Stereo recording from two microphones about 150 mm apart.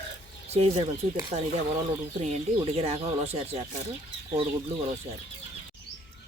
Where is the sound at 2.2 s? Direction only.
45° right (ahead or behind).